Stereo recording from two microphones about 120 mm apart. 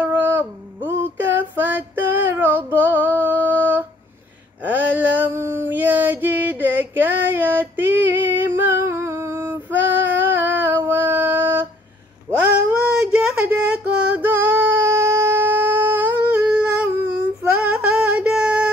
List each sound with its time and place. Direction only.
0.0 s female singing: 15° right (ahead or behind)
4.6 s a sound: 15° right (ahead or behind)
17.4 s female singing: 10° right (ahead or behind)